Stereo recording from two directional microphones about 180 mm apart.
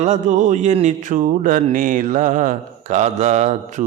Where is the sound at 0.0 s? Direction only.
40° right (ahead or behind).